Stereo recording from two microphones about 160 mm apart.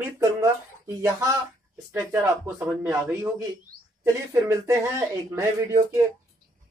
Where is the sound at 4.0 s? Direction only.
20° right (ahead or behind).